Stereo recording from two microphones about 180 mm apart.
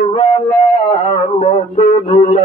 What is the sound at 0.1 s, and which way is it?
Music, 35° left (ahead or behind).